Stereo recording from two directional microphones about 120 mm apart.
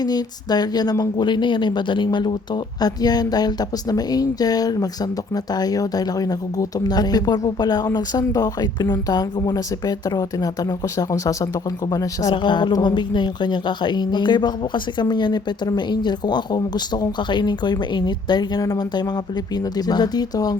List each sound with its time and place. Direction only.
0.0 s speech: 35° left (ahead or behind)